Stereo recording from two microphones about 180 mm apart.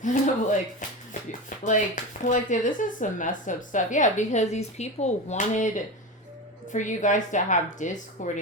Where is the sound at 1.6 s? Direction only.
45° left (ahead or behind).